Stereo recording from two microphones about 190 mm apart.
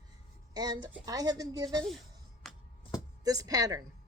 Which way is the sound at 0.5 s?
20° right (ahead or behind).